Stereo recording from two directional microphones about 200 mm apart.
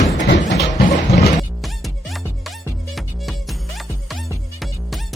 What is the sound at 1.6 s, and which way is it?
Music, centre (ahead or behind).